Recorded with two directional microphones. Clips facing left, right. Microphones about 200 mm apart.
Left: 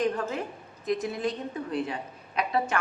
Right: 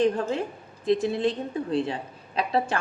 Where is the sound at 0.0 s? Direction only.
30° right (ahead or behind).